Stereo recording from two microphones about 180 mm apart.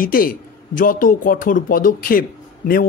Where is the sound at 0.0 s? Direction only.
50° left (ahead or behind).